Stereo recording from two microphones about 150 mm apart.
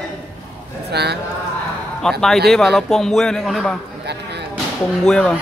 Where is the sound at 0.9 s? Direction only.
90° right.